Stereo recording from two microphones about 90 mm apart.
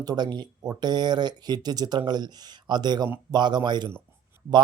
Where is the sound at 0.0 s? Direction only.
50° right (ahead or behind).